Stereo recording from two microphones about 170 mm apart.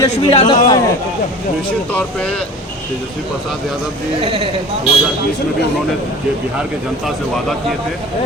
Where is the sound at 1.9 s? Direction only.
5° left (ahead or behind).